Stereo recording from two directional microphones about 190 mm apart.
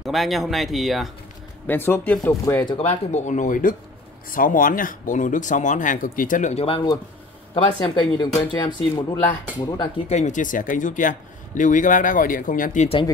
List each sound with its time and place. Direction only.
0.0 s speech: centre (ahead or behind)
1.7 s speech: 10° left (ahead or behind); by 12.8 s 45° left (ahead or behind)